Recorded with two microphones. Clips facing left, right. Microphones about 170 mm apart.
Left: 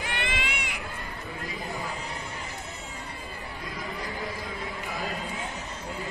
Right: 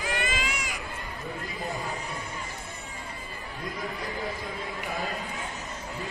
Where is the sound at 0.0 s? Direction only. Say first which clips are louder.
Right 2 dB; 65° left (ahead or behind).